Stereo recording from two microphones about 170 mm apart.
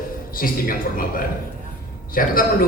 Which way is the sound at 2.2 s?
55° left (ahead or behind).